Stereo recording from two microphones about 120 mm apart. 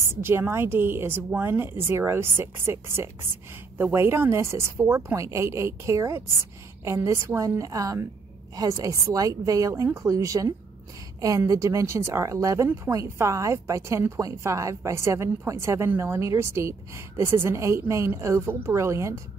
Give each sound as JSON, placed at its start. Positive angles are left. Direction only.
{"t": 0.0, "sound": "a woman's voice", "side_deg": -20}